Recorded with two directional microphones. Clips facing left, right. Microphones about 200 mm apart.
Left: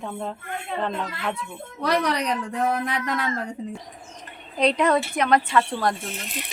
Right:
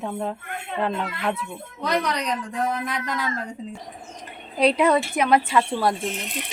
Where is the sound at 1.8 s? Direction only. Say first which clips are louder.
Left 2 dB; 65° left (ahead or behind).